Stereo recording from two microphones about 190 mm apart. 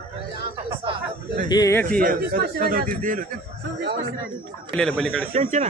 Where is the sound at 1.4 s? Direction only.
20° left (ahead or behind).